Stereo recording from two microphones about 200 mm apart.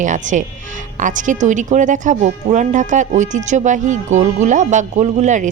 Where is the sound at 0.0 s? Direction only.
40° right (ahead or behind).